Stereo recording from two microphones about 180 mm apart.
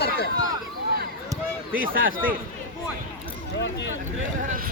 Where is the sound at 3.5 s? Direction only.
75° left (ahead or behind).